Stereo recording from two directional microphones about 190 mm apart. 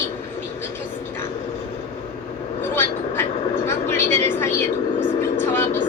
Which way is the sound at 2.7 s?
10° left (ahead or behind).